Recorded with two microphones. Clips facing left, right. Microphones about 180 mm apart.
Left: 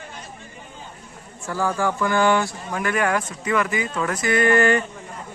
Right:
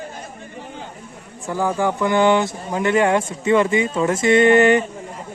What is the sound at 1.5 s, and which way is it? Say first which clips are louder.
Speech: right 3 dB; 15° right (ahead or behind).